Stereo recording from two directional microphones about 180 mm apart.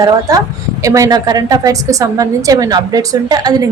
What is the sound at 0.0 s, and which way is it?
A woman's voice, 20° right (ahead or behind).